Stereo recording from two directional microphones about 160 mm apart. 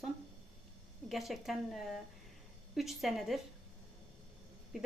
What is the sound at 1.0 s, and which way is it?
A woman's voice, centre (ahead or behind).